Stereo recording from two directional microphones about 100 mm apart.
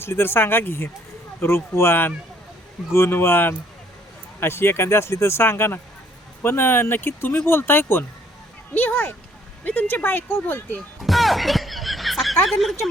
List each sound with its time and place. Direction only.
0.0 s speech: 25° left (ahead or behind)
11.0 s music: centre (ahead or behind)